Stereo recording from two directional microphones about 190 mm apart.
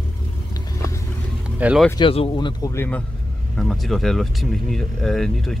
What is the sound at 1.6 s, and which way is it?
Speech, 5° right (ahead or behind).